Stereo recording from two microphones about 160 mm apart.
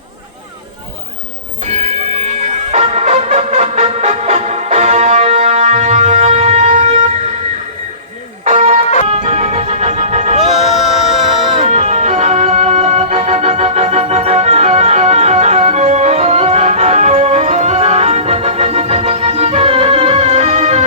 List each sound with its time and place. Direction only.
2.7 s music: 45° right (ahead or behind)
8.4 s music: 50° right (ahead or behind)
10.4 s music: centre (ahead or behind)
11.6 s music: 45° right (ahead or behind)